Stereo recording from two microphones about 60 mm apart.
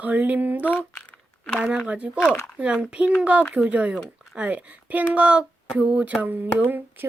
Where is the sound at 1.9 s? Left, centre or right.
Centre.